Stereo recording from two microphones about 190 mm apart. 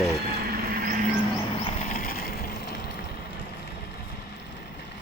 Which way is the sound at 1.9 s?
50° left (ahead or behind).